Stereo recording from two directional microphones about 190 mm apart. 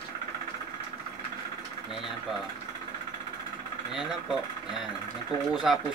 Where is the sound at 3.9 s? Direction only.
Centre (ahead or behind).